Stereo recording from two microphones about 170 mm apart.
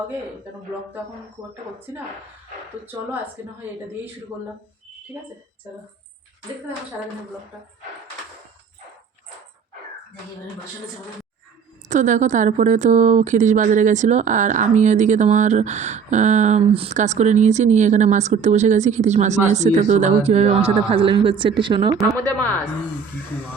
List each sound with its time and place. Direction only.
2.8 s speech: 10° right (ahead or behind)
11.9 s a woman's voice: 45° right (ahead or behind); by 21.9 s 30° right (ahead or behind)
22.2 s a woman's voice: 10° left (ahead or behind)